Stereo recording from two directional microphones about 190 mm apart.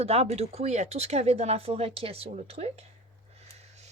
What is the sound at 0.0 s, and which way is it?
Speech, 35° right (ahead or behind).